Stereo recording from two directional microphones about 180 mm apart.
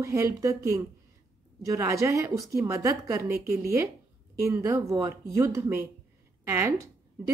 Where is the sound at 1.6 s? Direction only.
15° right (ahead or behind).